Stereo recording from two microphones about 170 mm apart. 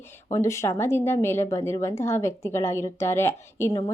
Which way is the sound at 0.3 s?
20° left (ahead or behind).